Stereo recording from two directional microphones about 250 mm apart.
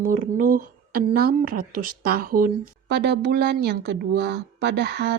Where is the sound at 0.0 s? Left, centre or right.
Right.